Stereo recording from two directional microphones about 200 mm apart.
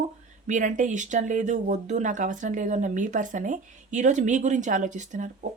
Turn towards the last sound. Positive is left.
turn(degrees=-40)  # may be behind; listen again after turning